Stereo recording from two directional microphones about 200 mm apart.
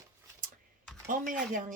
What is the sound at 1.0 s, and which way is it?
Speech, 40° right (ahead or behind).